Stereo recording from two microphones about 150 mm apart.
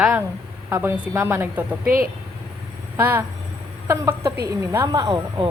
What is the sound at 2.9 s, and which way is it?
A woman's voice, 15° right (ahead or behind).